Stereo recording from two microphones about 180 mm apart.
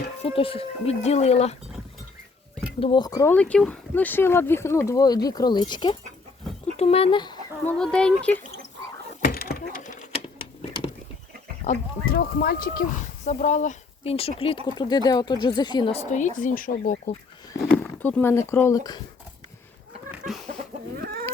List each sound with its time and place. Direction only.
0.2 s speech: 30° left (ahead or behind)
2.8 s speech: 25° left (ahead or behind)
3.3 s speech: 5° left (ahead or behind); by 7.3 s 25° left (ahead or behind)
7.6 s speech: 5° left (ahead or behind)
9.2 s a sound: 55° left (ahead or behind)
11.6 s speech: 50° left (ahead or behind); by 16.0 s 25° left (ahead or behind)
16.0 s speech: 40° left (ahead or behind)
17.7 s speech: 10° left (ahead or behind)
20.1 s a sound: centre (ahead or behind)
20.9 s chicken: 55° right (ahead or behind)